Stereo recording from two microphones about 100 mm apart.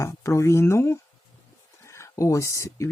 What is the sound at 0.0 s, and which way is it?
Speech, 30° left (ahead or behind).